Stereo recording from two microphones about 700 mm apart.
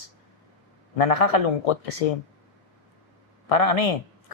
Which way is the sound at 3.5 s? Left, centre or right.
Left.